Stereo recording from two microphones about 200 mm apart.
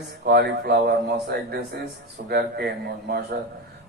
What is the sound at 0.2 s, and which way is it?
A man's voice, 55° right (ahead or behind).